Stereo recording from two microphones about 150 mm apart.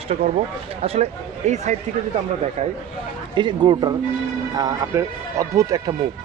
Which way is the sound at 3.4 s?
30° right (ahead or behind).